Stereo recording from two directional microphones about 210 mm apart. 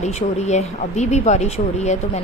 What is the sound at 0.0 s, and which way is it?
Speech, 35° left (ahead or behind).